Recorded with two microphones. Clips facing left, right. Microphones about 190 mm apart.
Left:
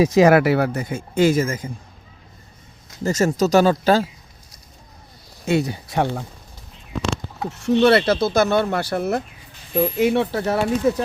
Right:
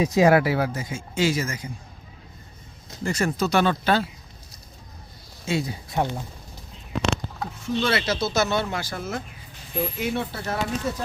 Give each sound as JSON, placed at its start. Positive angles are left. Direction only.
{"t": 0.0, "sound": "speech", "side_deg": 85}
{"t": 3.0, "sound": "speech", "side_deg": 40}
{"t": 5.5, "sound": "speech", "side_deg": 65}
{"t": 7.5, "sound": "speech", "side_deg": 70}